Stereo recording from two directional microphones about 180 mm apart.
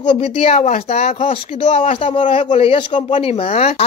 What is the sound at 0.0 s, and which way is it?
Speech, 30° left (ahead or behind).